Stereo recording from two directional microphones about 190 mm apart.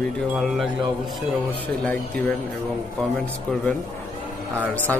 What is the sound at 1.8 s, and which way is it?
Speech, 5° left (ahead or behind).